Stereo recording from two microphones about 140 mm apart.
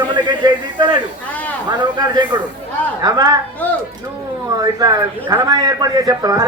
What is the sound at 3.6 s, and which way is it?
Speech, 10° left (ahead or behind).